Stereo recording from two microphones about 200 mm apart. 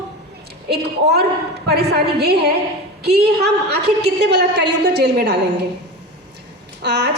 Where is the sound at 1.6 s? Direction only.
55° right (ahead or behind).